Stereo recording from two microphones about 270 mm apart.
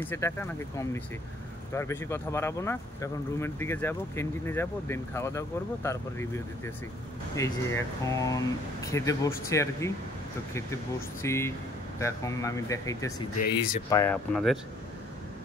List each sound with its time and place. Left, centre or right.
0.0 s speech: centre
11.2 s speech: centre
13.5 s speech: left
13.8 s speech: centre